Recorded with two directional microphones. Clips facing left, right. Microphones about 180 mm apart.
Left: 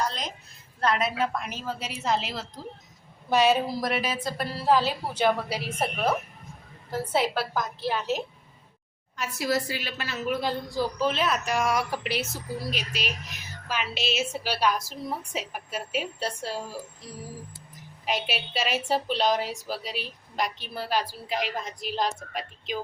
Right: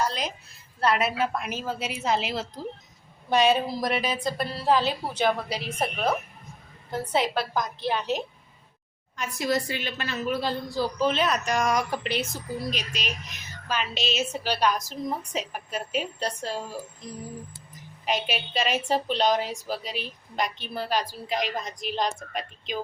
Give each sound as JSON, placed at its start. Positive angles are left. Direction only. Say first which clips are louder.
{"t": 0.0, "sound": "a sound", "louder": "right 2 dB", "side_deg": -5}
{"t": 0.8, "sound": "a woman's voice", "louder": "right 1 dB", "side_deg": -5}
{"t": 6.9, "sound": "speech", "louder": "even", "side_deg": 5}
{"t": 18.0, "sound": "speech", "louder": "right 1 dB", "side_deg": 0}